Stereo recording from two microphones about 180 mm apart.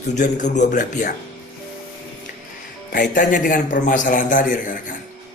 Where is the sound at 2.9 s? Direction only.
50° left (ahead or behind).